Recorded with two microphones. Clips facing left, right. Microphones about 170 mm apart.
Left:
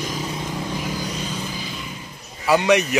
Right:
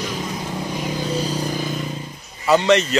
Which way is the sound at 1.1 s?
35° right (ahead or behind).